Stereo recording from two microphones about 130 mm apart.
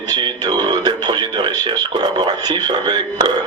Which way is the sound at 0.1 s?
30° right (ahead or behind).